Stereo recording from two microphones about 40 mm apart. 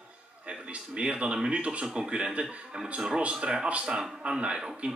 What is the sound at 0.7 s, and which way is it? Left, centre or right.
Speech, right.